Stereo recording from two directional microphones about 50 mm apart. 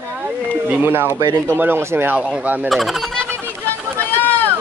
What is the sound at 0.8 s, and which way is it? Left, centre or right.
Speech, right.